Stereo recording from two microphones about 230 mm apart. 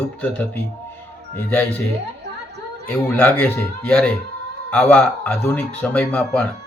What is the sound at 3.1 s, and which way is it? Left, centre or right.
A man's voice, centre.